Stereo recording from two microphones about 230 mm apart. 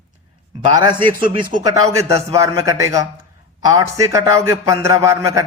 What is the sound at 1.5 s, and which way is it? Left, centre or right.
Speech, centre.